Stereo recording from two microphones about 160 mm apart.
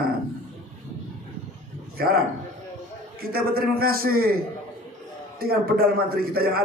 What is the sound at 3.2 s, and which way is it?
Speech, 70° right (ahead or behind).